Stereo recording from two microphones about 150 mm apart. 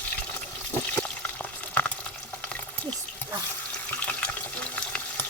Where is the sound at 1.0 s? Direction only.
10° left (ahead or behind).